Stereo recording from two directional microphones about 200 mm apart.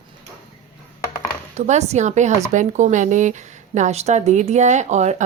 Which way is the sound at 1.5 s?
35° right (ahead or behind).